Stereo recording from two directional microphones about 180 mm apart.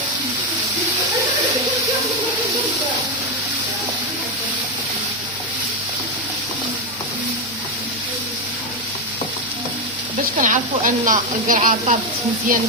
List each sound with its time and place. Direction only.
10.4 s speech: 45° right (ahead or behind)